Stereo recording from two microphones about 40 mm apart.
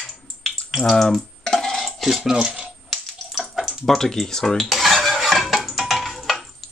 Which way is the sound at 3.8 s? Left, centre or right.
Centre.